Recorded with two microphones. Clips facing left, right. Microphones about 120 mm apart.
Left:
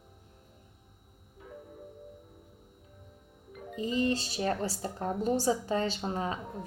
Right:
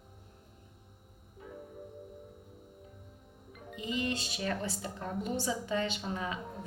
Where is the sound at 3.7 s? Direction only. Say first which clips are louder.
Left 5 dB; 35° left (ahead or behind).